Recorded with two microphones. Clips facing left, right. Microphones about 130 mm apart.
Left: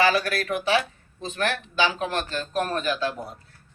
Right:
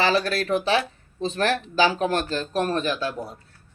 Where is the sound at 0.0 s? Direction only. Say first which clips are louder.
Even; 30° right (ahead or behind).